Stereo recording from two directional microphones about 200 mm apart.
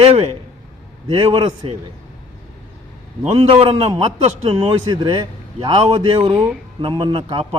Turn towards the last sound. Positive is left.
turn(degrees=-25)  # may be behind; listen again after turning